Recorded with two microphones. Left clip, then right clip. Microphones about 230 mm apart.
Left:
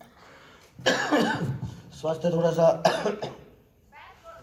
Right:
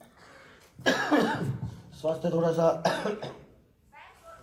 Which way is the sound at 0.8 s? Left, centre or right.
Left.